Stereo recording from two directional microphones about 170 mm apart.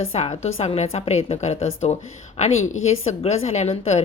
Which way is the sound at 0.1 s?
40° left (ahead or behind).